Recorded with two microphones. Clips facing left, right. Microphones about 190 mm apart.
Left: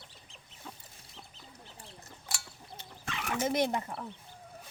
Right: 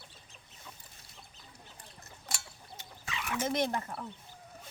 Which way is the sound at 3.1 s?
50° left (ahead or behind).